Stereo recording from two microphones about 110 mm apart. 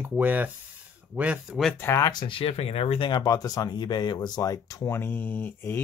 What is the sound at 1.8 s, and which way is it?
Speech, 25° left (ahead or behind).